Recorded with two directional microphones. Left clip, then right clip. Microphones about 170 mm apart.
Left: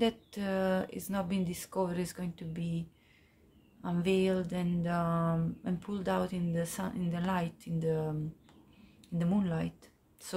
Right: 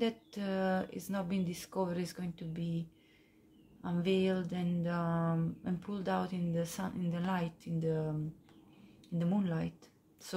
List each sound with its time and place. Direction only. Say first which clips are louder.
0.0 s speech: left 4 dB; 25° left (ahead or behind)
3.8 s speech: left 2 dB; 25° left (ahead or behind)
9.2 s speech: left 2 dB; 20° left (ahead or behind)